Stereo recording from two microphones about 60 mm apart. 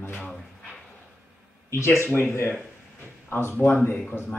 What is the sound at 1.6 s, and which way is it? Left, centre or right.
Speech, left.